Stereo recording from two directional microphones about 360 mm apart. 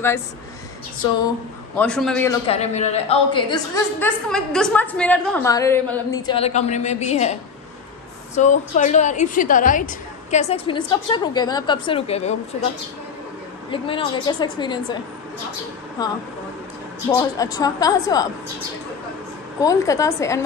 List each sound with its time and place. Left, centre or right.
1.8 s a man's voice: centre
2.4 s a woman's voice: centre
8.4 s a woman's voice: centre
13.7 s a woman's voice: centre
16.0 s a woman's voice: centre
17.4 s a woman's voice: centre
19.6 s a woman's voice: centre